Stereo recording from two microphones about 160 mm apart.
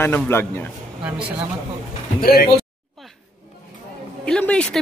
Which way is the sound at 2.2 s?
70° left (ahead or behind).